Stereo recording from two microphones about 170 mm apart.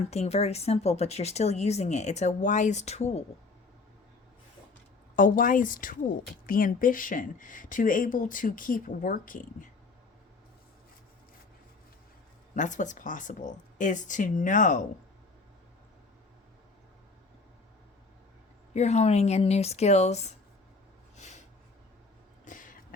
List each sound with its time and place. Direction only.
0.1 s speech: 40° left (ahead or behind)
5.1 s speech: 50° left (ahead or behind)
12.5 s speech: 45° left (ahead or behind)
18.7 s speech: 40° left (ahead or behind)
22.4 s a sound: 50° left (ahead or behind)